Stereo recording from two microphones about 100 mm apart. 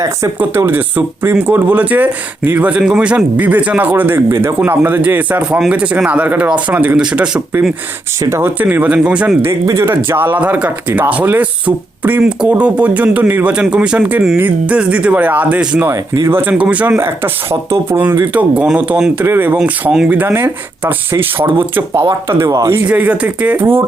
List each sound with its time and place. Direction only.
0.3 s speech: 20° right (ahead or behind)
8.2 s speech: 25° right (ahead or behind)
9.7 s speech: 25° right (ahead or behind)
15.9 s speech: 25° right (ahead or behind)
22.9 s speech: 15° right (ahead or behind)